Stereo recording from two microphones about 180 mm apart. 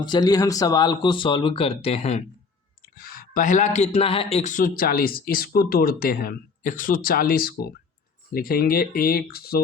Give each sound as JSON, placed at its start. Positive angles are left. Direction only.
{"t": 0.0, "sound": "speech", "side_deg": 25}
{"t": 2.9, "sound": "speech", "side_deg": 55}